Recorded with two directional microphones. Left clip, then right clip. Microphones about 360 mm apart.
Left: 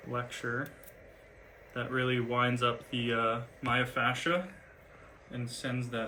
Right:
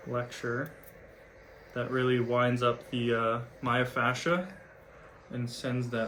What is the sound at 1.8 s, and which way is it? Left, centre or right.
Speech, centre.